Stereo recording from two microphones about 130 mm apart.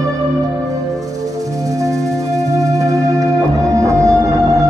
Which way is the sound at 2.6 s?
25° right (ahead or behind).